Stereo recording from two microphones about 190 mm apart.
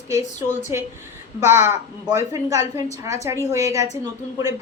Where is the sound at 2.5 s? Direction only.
35° left (ahead or behind).